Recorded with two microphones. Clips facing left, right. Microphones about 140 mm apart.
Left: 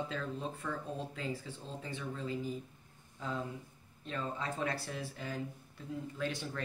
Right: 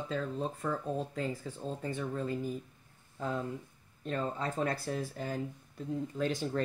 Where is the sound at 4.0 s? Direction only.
45° right (ahead or behind).